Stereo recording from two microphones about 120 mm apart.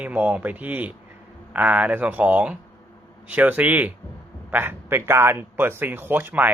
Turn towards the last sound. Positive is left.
turn(degrees=-15)  # may be behind; listen again after turning